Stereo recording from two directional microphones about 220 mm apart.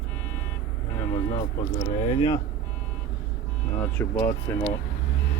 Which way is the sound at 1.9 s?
20° left (ahead or behind).